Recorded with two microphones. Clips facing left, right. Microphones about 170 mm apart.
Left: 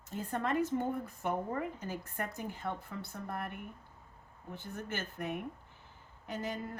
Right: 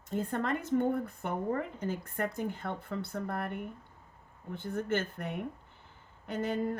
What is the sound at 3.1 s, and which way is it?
Speech, 60° right (ahead or behind).